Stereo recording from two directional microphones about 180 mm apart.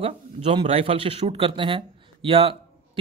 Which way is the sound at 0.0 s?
30° right (ahead or behind).